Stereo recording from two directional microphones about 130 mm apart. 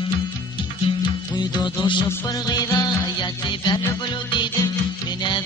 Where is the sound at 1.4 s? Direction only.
35° left (ahead or behind).